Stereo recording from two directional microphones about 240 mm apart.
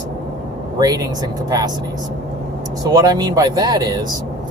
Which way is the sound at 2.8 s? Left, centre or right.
Centre.